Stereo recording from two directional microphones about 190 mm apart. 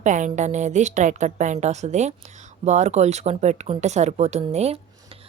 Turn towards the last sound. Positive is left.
turn(degrees=-35)  # may be behind; listen again after turning